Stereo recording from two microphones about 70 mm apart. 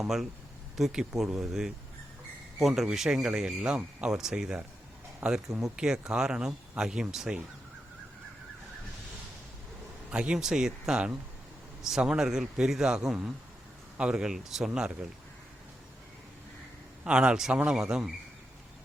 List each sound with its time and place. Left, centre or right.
0.0 s speech: centre
5.2 s speech: right
5.5 s speech: centre
10.1 s speech: centre
17.0 s speech: centre